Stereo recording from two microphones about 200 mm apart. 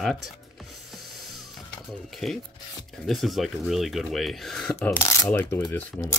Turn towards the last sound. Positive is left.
turn(degrees=15)  # may be behind; listen again after turning